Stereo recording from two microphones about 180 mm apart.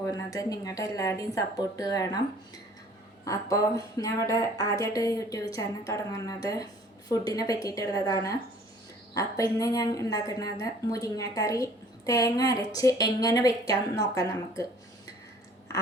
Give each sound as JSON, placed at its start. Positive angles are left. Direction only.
{"t": 0.0, "sound": "a woman's voice", "side_deg": 20}
{"t": 3.2, "sound": "a woman's voice", "side_deg": 20}